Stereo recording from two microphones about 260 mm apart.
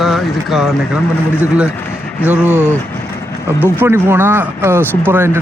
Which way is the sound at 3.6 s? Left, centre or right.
Centre.